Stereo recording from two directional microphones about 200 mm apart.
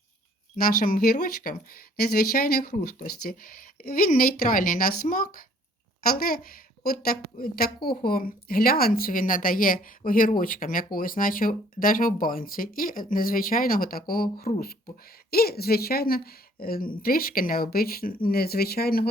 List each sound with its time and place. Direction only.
0.5 s speech: 45° left (ahead or behind)